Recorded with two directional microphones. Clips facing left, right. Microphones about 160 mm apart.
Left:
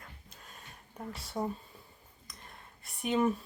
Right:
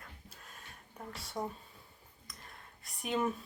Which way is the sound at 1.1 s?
Centre (ahead or behind).